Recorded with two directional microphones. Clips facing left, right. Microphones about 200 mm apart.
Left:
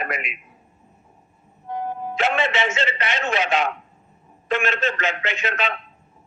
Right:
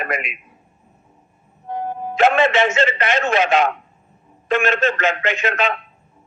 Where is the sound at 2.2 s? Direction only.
50° right (ahead or behind).